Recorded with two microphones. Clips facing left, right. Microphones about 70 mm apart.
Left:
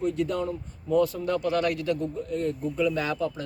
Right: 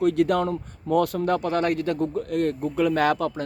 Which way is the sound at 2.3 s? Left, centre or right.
Right.